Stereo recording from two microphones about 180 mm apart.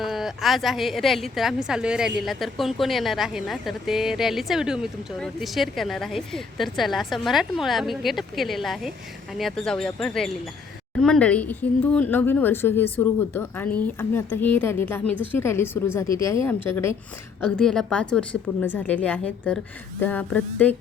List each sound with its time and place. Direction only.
0.0 s a woman's voice: centre (ahead or behind)